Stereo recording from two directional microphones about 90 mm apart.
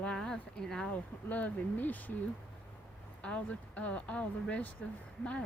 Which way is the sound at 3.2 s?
15° left (ahead or behind).